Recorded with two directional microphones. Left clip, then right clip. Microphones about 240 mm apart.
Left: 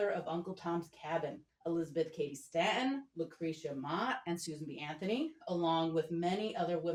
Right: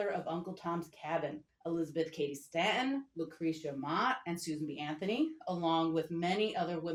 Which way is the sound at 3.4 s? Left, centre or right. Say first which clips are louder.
Right 5 dB; right.